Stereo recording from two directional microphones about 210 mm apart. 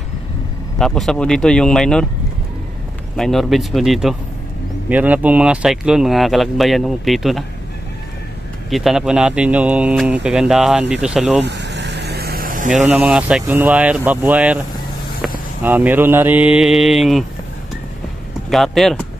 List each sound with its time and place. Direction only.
0.7 s speech: centre (ahead or behind)
3.2 s speech: centre (ahead or behind)
8.6 s speech: centre (ahead or behind)
11.4 s vehicle: 55° right (ahead or behind); by 12.8 s 40° right (ahead or behind)
12.8 s speech: 5° right (ahead or behind)
18.5 s speech: centre (ahead or behind)